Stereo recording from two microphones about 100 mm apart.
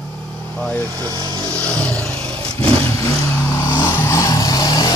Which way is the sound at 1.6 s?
10° left (ahead or behind).